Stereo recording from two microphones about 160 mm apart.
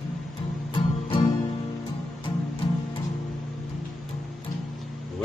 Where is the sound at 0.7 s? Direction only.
30° left (ahead or behind).